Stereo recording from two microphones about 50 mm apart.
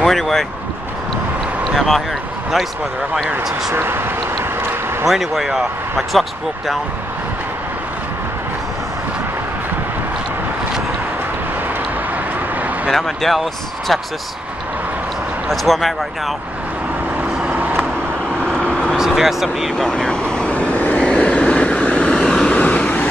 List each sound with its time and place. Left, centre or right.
0.0 s speech: centre
1.8 s a man's voice: centre
3.7 s speech: right
5.0 s a man's voice: centre
12.9 s a man's voice: centre
15.4 s a man's voice: centre
17.5 s vehicle: right
18.5 s vehicle: centre
18.9 s speech: centre
19.9 s vehicle: centre